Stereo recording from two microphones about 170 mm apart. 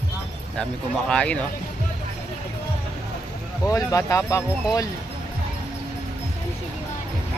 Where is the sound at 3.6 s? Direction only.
20° left (ahead or behind).